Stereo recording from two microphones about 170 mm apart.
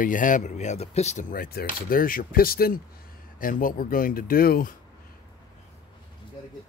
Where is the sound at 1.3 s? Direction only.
60° left (ahead or behind).